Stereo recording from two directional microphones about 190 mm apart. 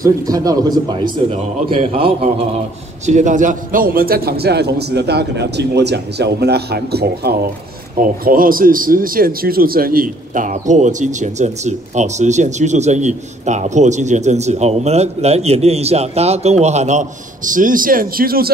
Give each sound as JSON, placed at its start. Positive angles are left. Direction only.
{"t": 0.0, "sound": "a man's voice", "side_deg": -20}